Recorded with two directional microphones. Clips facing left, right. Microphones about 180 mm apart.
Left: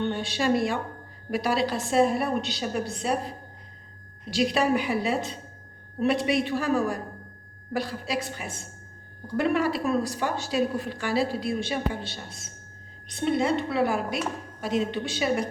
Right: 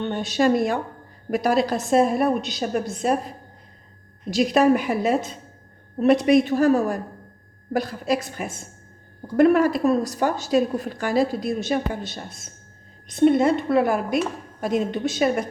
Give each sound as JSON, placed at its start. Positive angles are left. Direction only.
{"t": 0.1, "sound": "a woman's voice", "side_deg": -45}
{"t": 4.3, "sound": "a woman's voice", "side_deg": -45}